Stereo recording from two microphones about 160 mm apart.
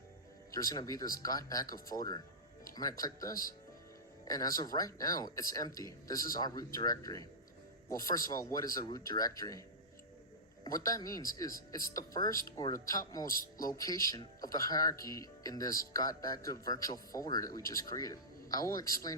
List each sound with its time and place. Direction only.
0.5 s speech: 20° left (ahead or behind)